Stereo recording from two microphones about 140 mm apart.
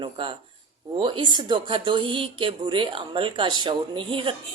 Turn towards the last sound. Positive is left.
turn(degrees=-35)  # may be behind; listen again after turning